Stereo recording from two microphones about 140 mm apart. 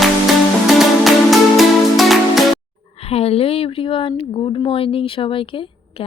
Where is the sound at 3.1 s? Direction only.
45° left (ahead or behind).